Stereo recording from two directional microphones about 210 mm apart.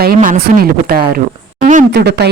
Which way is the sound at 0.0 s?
45° right (ahead or behind).